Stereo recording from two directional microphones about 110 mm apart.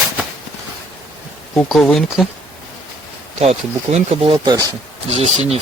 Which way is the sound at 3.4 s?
70° right (ahead or behind).